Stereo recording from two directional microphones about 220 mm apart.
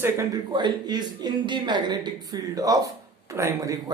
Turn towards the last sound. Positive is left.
turn(degrees=-15)  # may be behind; listen again after turning